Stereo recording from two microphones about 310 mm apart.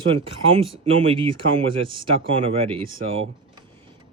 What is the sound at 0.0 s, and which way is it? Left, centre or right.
Speech, centre.